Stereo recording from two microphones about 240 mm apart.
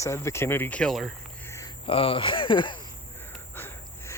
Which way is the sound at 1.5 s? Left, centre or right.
Centre.